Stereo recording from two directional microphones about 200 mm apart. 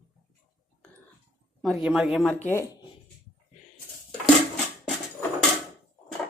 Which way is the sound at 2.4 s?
15° left (ahead or behind).